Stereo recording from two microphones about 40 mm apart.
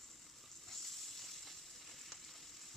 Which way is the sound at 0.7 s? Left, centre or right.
Centre.